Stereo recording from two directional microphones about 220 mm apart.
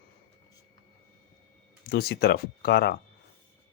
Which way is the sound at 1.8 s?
45° left (ahead or behind).